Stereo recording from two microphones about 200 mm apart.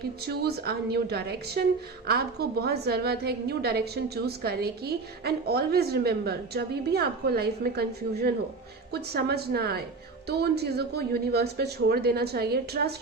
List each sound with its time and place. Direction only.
0.3 s a woman's voice: 50° right (ahead or behind)